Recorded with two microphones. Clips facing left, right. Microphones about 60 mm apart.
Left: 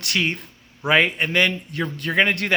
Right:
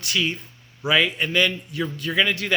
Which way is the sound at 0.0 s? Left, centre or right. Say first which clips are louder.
Left 1 dB; left.